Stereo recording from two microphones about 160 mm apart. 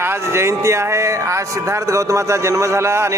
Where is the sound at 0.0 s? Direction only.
15° right (ahead or behind).